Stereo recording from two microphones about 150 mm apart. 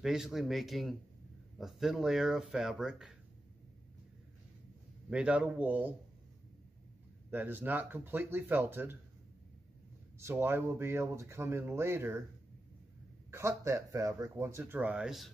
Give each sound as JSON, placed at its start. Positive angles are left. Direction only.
{"t": 0.0, "sound": "speech", "side_deg": -5}
{"t": 5.1, "sound": "speech", "side_deg": -10}
{"t": 7.2, "sound": "speech", "side_deg": -15}
{"t": 10.1, "sound": "speech", "side_deg": -15}
{"t": 13.3, "sound": "speech", "side_deg": -20}